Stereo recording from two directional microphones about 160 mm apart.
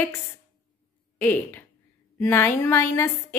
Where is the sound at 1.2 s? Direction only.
10° left (ahead or behind).